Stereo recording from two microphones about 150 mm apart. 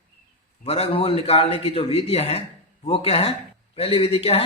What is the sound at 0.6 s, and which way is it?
Speech, 40° left (ahead or behind).